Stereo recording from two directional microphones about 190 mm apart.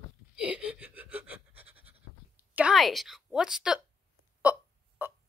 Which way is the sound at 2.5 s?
5° right (ahead or behind).